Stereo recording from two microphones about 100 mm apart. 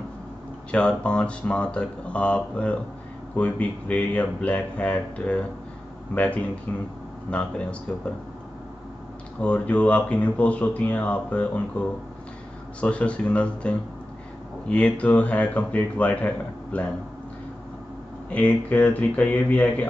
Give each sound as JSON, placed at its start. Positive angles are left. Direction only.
{"t": 0.7, "sound": "speech", "side_deg": 10}
{"t": 9.4, "sound": "speech", "side_deg": 15}
{"t": 18.3, "sound": "speech", "side_deg": 15}